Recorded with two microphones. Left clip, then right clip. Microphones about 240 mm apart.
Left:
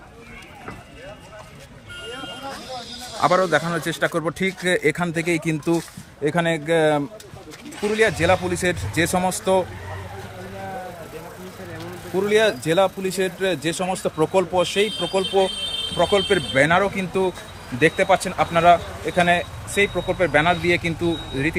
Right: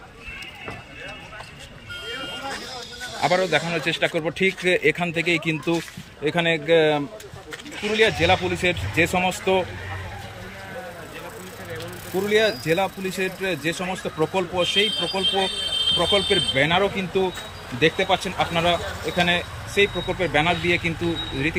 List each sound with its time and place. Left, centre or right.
3.2 s a man's voice: centre
12.3 s speech: centre